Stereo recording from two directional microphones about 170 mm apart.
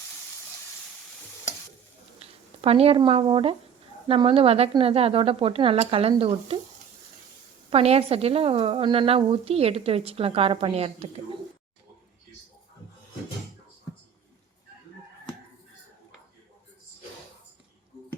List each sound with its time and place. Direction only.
2.1 s a woman's voice: 35° right (ahead or behind)
7.7 s a woman's voice: 35° right (ahead or behind)